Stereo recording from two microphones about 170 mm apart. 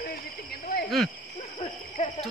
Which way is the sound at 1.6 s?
35° left (ahead or behind).